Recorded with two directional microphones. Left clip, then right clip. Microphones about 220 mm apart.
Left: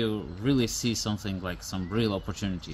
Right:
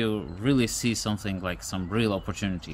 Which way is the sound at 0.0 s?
15° right (ahead or behind).